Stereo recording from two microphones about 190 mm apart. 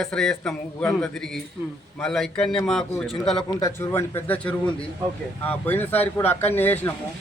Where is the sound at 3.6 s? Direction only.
15° left (ahead or behind).